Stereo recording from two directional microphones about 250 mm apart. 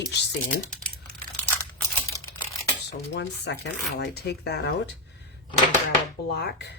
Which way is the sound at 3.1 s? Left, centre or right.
Left.